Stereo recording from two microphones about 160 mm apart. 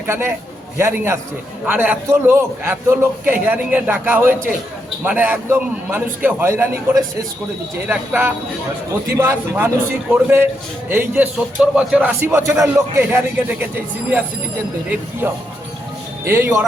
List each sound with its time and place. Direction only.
0.1 s a man's voice: 15° right (ahead or behind)
7.9 s a man's voice: 10° right (ahead or behind)